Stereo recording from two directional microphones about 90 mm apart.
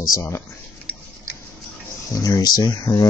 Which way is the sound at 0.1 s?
35° left (ahead or behind).